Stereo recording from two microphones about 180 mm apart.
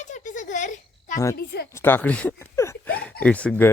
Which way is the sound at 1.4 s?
65° left (ahead or behind).